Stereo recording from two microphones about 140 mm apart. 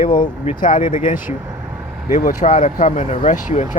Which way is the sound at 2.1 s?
60° left (ahead or behind).